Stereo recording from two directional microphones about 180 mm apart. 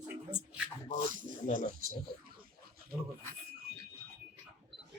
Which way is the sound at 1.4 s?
45° left (ahead or behind).